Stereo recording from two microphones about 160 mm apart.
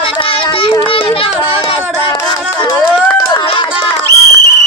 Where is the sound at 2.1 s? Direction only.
25° left (ahead or behind).